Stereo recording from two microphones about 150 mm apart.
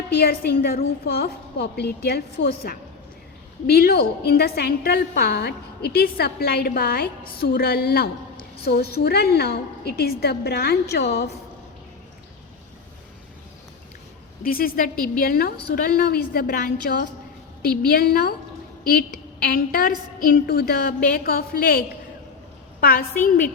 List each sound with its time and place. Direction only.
0.2 s a woman's voice: 80° left
14.4 s a woman's voice: 75° left (ahead or behind)